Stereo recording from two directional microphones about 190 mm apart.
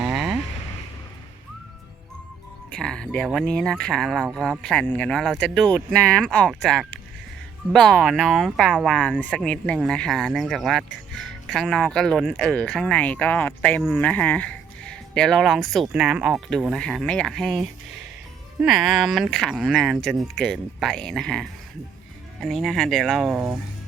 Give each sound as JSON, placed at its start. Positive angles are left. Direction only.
{"t": 0.0, "sound": "vehicle", "side_deg": 0}
{"t": 2.7, "sound": "speech", "side_deg": 5}